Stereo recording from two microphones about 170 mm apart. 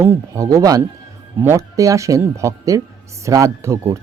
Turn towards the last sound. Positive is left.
turn(degrees=-20)  # may be behind; listen again after turning